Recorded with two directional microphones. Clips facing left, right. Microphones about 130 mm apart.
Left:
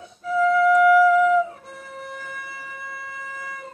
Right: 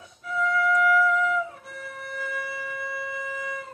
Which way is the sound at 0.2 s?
30° left (ahead or behind).